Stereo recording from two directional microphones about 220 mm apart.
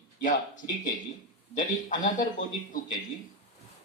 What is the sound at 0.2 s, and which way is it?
Speech, 35° left (ahead or behind).